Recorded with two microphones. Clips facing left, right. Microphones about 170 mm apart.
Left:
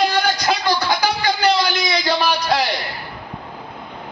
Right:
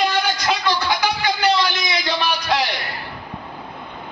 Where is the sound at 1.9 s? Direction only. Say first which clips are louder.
Left 3 dB; 35° left (ahead or behind).